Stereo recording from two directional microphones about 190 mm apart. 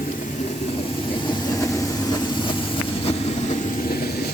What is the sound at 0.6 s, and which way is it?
Vehicle, 30° left (ahead or behind).